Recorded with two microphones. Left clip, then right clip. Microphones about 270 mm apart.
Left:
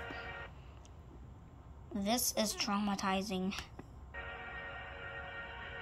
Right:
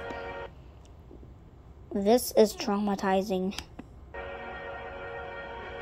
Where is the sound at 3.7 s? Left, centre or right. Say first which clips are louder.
Right 6 dB; right.